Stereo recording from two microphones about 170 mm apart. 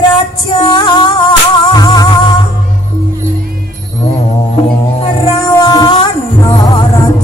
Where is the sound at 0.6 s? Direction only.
25° left (ahead or behind).